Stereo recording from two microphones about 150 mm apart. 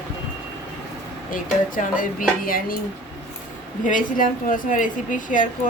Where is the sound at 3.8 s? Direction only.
65° left (ahead or behind).